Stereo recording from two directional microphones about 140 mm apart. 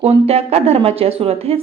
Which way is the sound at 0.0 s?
45° right (ahead or behind).